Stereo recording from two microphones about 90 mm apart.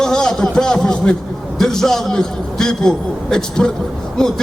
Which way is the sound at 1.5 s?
5° left (ahead or behind).